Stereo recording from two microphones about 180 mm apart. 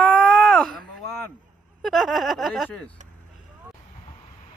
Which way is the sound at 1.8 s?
Centre (ahead or behind).